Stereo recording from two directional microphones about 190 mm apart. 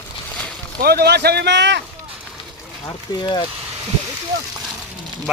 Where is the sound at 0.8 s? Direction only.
55° right (ahead or behind).